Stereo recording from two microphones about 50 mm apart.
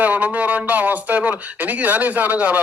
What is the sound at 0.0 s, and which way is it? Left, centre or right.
A man's voice, right.